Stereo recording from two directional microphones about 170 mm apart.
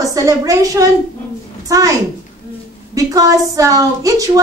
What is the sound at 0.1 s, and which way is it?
A woman's voice, 20° right (ahead or behind).